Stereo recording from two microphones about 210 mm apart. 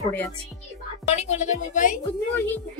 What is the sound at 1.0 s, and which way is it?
Speech, 30° left (ahead or behind).